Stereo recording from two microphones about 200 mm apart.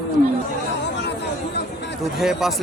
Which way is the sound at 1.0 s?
60° left (ahead or behind).